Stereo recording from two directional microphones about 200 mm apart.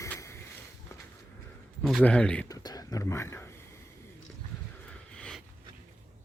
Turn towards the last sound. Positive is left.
turn(degrees=5)  # may be behind; listen again after turning